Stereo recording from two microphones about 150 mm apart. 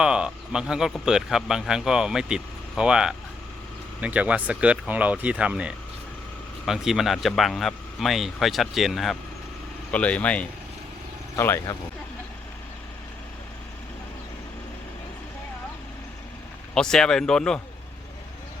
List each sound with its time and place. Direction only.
0.0 s speech: 5° right (ahead or behind); by 11.8 s 15° left (ahead or behind)
16.7 s speech: 5° left (ahead or behind)